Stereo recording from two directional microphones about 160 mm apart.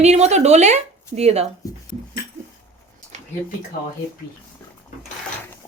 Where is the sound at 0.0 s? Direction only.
45° right (ahead or behind).